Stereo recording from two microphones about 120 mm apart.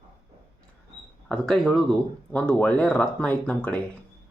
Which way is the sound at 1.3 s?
5° left (ahead or behind).